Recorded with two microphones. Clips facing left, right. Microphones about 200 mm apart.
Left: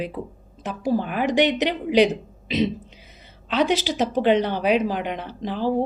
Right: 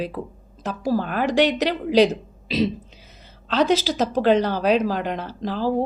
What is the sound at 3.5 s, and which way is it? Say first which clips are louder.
Speech: right 2 dB; 40° right (ahead or behind).